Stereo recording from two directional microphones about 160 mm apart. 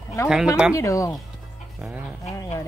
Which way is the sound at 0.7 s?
20° left (ahead or behind).